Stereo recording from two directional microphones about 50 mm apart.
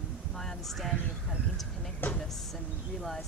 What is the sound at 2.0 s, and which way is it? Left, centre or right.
Speech, left.